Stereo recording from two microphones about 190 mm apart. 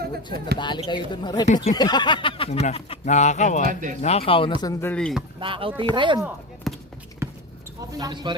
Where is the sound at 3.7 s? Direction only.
45° right (ahead or behind).